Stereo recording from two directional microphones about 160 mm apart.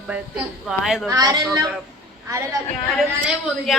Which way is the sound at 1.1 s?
20° right (ahead or behind).